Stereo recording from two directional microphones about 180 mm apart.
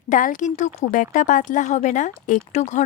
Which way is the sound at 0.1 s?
45° left (ahead or behind).